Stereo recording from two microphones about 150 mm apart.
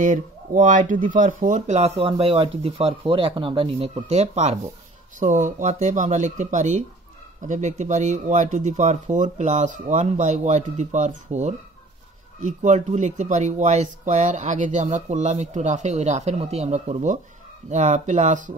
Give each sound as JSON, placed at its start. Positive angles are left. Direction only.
{"t": 0.0, "sound": "speech", "side_deg": -60}
{"t": 5.2, "sound": "speech", "side_deg": -60}